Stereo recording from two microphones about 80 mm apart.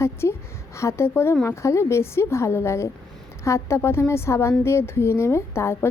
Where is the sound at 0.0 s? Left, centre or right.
Left.